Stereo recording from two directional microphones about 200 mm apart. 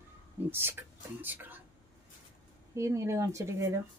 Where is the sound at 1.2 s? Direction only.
10° right (ahead or behind).